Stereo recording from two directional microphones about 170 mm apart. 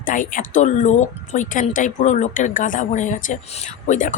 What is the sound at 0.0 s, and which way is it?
Speech, 50° left (ahead or behind).